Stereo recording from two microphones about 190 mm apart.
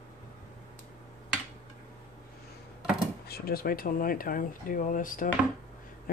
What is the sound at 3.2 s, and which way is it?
A man's voice, 55° left (ahead or behind).